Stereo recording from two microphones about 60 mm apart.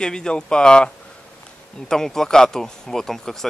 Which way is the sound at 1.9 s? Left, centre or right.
Centre.